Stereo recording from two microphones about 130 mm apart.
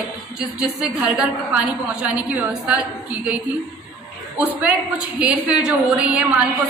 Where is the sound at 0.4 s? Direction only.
5° right (ahead or behind).